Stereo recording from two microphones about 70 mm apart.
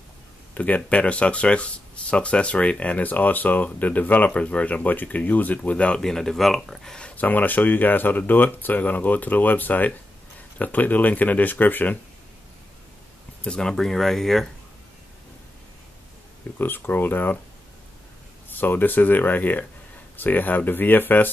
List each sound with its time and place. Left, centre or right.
0.6 s speech: left
13.4 s speech: centre
16.5 s speech: left
18.6 s speech: left